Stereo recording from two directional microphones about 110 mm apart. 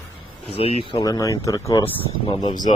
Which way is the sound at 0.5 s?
60° left (ahead or behind).